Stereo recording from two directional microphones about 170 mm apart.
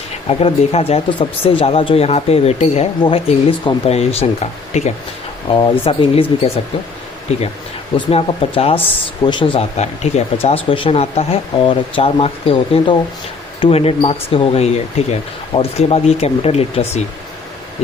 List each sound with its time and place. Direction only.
0.3 s speech: 35° left (ahead or behind)
5.5 s speech: 30° left (ahead or behind)
7.9 s speech: 35° left (ahead or behind)